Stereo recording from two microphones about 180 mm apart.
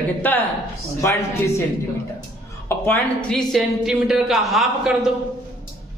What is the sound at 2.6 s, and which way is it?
A woman's voice, 10° left (ahead or behind).